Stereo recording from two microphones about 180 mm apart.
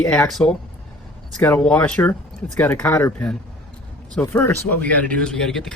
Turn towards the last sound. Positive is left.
turn(degrees=0)  # may be behind; listen again after turning